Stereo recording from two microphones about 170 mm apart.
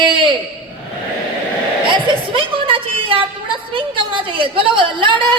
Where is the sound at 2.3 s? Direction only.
30° right (ahead or behind).